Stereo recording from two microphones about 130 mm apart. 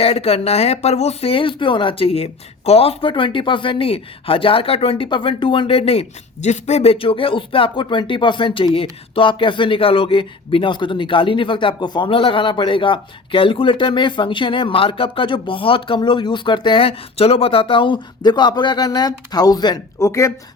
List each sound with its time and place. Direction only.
0.0 s speech: 50° left (ahead or behind); by 20.3 s 25° left (ahead or behind)